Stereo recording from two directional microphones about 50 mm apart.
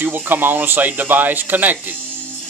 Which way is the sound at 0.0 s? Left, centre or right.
Right.